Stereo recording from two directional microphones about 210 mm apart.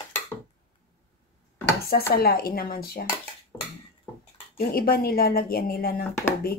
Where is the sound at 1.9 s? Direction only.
45° left (ahead or behind).